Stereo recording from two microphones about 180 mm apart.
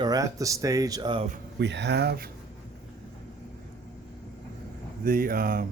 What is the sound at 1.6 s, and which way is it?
Speech, 75° right (ahead or behind).